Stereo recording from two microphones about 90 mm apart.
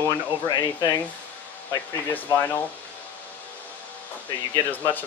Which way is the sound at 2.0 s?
25° left (ahead or behind).